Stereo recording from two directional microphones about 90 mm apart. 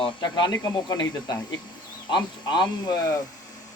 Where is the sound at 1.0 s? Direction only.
50° left (ahead or behind).